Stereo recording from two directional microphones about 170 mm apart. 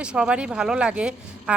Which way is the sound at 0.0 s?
5° right (ahead or behind).